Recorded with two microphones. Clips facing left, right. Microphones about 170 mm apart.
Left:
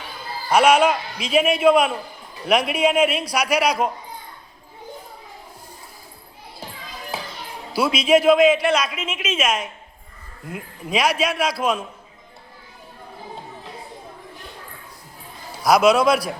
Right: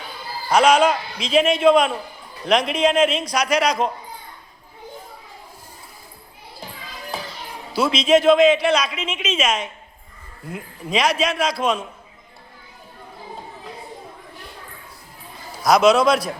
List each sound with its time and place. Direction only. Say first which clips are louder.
0.5 s a man's voice: even; 5° left (ahead or behind)
7.7 s a man's voice: right 1 dB; 5° left (ahead or behind)
15.6 s a man's voice: right 1 dB; 5° left (ahead or behind)